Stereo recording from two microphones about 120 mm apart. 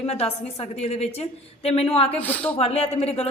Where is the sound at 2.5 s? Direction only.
55° left (ahead or behind).